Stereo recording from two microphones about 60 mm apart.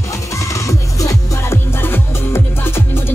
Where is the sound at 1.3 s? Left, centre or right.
Left.